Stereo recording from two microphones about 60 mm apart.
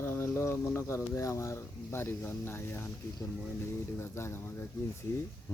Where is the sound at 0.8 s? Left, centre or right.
Left.